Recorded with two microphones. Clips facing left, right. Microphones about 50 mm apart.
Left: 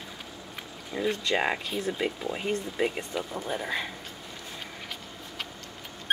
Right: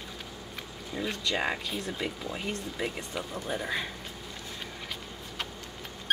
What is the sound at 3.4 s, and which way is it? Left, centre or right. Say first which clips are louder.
Speech: left 1 dB; centre.